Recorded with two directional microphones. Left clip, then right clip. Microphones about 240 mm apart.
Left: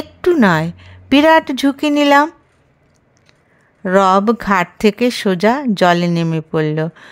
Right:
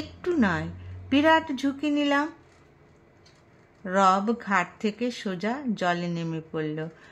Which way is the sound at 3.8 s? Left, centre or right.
Left.